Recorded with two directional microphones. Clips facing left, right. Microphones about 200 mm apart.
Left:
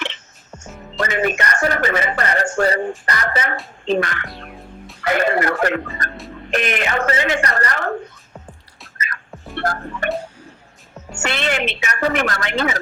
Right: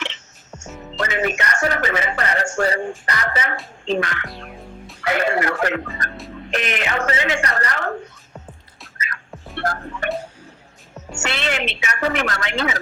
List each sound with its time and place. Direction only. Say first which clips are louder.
0.9 s speech: left 2 dB; 50° left (ahead or behind)
4.3 s music: even; centre (ahead or behind)
5.0 s speech: left 2 dB; 45° left (ahead or behind)
5.9 s music: left 1 dB; centre (ahead or behind)
6.5 s speech: left 3 dB; 50° left (ahead or behind)
9.3 s music: left 2 dB; centre (ahead or behind)
9.6 s speech: left 2 dB; 45° left (ahead or behind)
11.2 s speech: left 3 dB; 50° left (ahead or behind)